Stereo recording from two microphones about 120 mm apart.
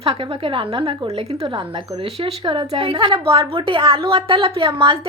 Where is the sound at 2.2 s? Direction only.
45° right (ahead or behind).